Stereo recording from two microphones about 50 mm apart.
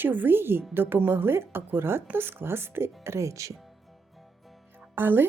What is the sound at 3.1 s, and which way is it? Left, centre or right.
Speech, right.